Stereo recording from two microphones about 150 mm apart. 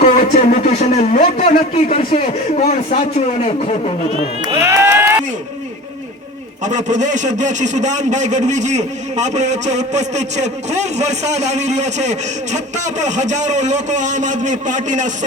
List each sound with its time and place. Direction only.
0.2 s speech: 50° left (ahead or behind)
1.5 s a man's voice: 55° left (ahead or behind)
2.0 s a man's voice: 65° left (ahead or behind)
2.9 s a man's voice: 40° left (ahead or behind)
4.5 s speech: 15° right (ahead or behind)
6.7 s a man's voice: 55° right (ahead or behind)